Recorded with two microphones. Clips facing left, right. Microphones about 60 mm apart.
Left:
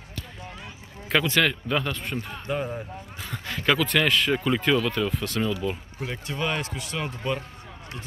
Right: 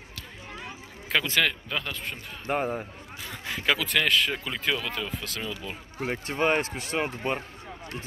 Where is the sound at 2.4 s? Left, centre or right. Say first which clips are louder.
Right 3 dB; right.